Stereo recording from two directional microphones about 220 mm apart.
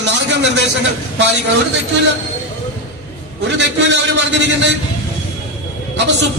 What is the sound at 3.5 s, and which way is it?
A man's voice, 55° right (ahead or behind).